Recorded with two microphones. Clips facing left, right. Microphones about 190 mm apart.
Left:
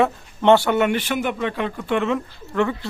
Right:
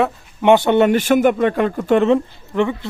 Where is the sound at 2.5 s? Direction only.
15° right (ahead or behind).